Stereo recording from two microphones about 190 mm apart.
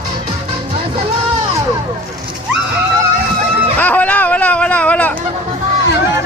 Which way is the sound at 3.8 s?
10° left (ahead or behind).